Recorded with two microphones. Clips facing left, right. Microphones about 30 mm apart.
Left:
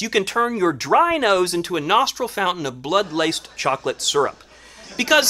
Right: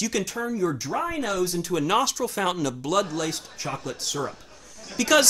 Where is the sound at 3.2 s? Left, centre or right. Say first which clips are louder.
Left 8 dB; left.